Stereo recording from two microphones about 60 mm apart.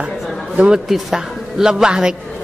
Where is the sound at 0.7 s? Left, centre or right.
Centre.